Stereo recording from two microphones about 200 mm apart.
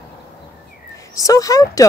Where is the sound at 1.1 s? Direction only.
15° left (ahead or behind).